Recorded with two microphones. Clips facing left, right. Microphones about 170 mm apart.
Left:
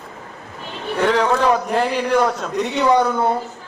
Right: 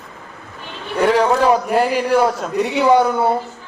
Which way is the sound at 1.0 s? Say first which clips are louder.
Right 3 dB; 10° right (ahead or behind).